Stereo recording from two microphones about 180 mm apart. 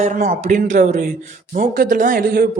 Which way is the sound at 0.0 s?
45° right (ahead or behind).